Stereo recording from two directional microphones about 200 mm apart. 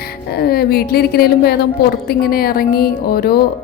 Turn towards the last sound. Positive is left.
turn(degrees=50)  # may be behind; listen again after turning